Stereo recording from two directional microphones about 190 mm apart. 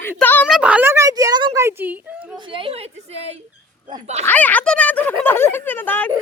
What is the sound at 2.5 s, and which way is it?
A woman's voice, 25° right (ahead or behind).